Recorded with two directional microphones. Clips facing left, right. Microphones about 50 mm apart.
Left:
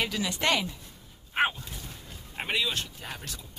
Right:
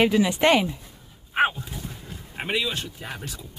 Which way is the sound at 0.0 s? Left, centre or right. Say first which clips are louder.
Right 9 dB; right.